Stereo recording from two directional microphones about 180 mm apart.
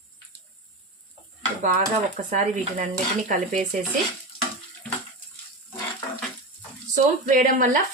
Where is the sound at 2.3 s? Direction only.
45° right (ahead or behind).